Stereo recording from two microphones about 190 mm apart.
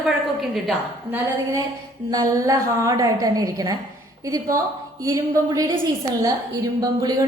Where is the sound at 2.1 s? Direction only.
15° right (ahead or behind).